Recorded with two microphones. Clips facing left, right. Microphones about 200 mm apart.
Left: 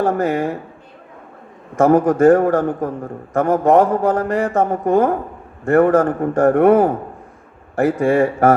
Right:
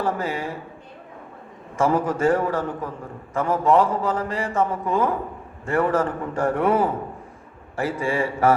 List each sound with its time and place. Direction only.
0.0 s a man's voice: 60° left (ahead or behind)
1.8 s a man's voice: 60° left (ahead or behind)